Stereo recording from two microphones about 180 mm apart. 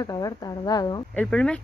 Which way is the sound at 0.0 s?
20° left (ahead or behind).